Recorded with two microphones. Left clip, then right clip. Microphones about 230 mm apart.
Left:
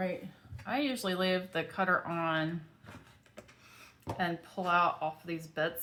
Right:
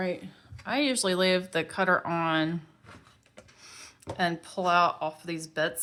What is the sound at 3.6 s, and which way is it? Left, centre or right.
Speech, right.